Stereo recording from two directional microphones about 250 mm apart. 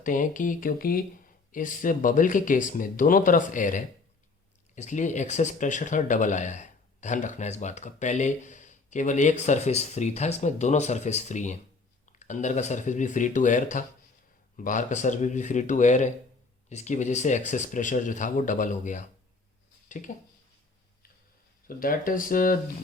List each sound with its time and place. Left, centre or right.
0.0 s speech: left
21.7 s speech: left